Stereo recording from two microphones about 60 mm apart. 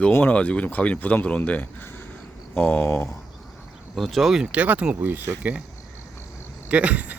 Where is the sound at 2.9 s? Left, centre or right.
Left.